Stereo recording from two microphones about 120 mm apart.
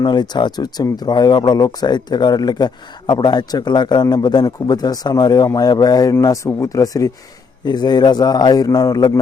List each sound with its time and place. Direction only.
0.0 s speech: 40° left (ahead or behind)